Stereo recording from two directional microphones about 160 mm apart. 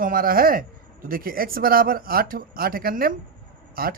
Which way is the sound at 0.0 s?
60° right (ahead or behind).